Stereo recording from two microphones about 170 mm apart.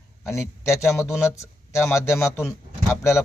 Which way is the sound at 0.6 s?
15° left (ahead or behind).